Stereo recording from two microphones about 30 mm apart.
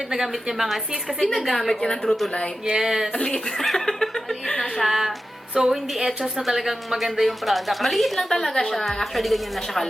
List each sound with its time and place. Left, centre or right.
0.1 s a woman's voice: centre
1.5 s speech: centre
1.8 s a woman's voice: left
2.6 s a woman's voice: centre
3.6 s speech: centre
4.8 s a woman's voice: centre
5.5 s a woman's voice: centre
6.4 s a woman's voice: centre
8.4 s a woman's voice: centre